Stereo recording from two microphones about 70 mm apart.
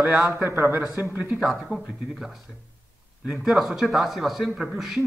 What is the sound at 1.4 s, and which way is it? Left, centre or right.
A man's voice, centre.